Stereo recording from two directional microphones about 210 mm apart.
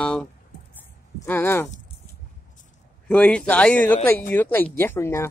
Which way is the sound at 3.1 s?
5° left (ahead or behind).